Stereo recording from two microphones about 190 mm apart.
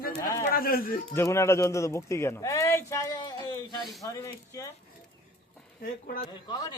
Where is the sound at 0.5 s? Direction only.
50° left (ahead or behind).